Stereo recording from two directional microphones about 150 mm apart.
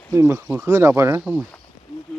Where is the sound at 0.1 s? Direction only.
15° right (ahead or behind).